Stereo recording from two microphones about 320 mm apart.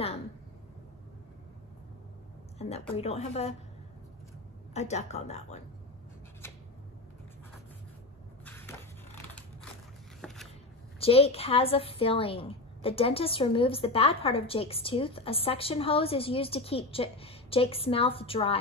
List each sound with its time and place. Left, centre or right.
2.6 s speech: centre
4.7 s speech: left
8.5 s a sound: centre
11.0 s a woman's voice: centre